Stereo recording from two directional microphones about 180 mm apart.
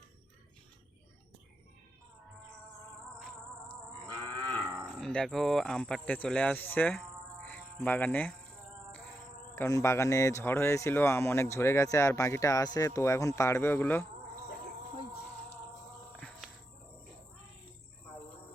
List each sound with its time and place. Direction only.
4.0 s livestock: 20° right (ahead or behind)
4.9 s speech: centre (ahead or behind)
7.4 s music: 10° left (ahead or behind)
9.6 s speech: 15° left (ahead or behind)
16.1 s cricket: 5° left (ahead or behind)